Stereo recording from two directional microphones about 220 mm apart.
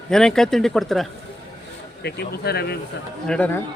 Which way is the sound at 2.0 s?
50° left (ahead or behind).